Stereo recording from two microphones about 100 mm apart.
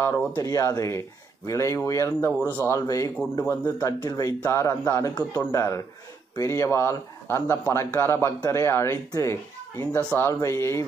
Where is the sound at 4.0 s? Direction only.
40° left (ahead or behind).